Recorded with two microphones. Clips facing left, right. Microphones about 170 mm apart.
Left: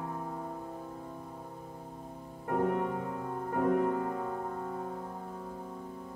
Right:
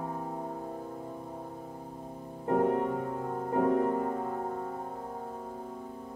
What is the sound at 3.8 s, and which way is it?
Music, 35° right (ahead or behind).